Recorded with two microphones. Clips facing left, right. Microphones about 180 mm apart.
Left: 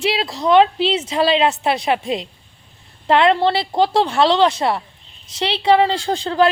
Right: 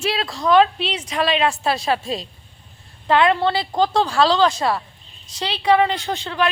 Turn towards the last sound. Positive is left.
turn(degrees=35)  # may be behind; listen again after turning